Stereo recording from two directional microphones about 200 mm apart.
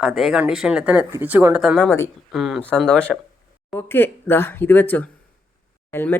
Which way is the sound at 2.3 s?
Centre (ahead or behind).